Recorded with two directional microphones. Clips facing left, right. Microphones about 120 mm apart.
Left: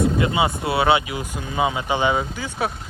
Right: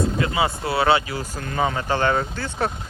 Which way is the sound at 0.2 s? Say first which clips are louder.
Left 2 dB; 20° left (ahead or behind).